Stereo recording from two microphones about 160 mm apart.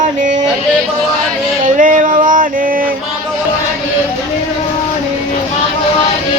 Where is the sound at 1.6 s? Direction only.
55° right (ahead or behind).